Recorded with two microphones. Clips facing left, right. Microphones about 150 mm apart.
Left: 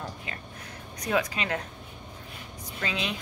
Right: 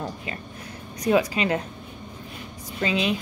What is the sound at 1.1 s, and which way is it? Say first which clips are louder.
Speech: right 6 dB; 10° right (ahead or behind).